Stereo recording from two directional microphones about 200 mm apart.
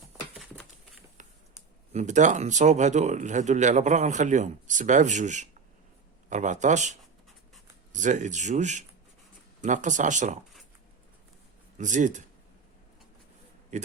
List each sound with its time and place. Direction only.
1.9 s speech: 35° right (ahead or behind)
7.9 s speech: 40° right (ahead or behind)
11.8 s speech: 40° right (ahead or behind)
13.7 s a man's voice: 35° right (ahead or behind)